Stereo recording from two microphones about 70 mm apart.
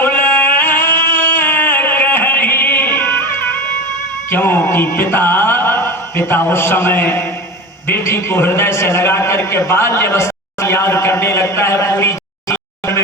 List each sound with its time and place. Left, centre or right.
0.0 s music: left
7.9 s a man's voice: left